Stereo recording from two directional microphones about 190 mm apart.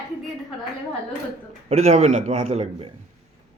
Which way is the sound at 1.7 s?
35° right (ahead or behind).